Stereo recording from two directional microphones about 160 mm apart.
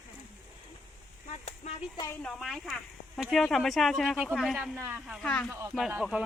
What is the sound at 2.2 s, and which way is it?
Speech, centre (ahead or behind).